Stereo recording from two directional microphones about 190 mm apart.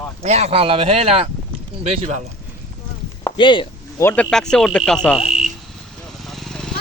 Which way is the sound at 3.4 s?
25° left (ahead or behind).